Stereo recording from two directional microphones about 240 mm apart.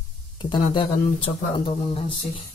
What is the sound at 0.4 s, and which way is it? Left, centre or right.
Speech, centre.